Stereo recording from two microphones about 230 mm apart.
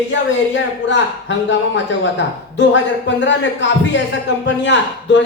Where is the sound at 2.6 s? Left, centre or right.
Left.